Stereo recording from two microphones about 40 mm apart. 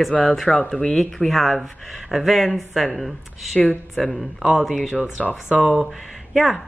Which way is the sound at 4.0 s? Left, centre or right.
Left.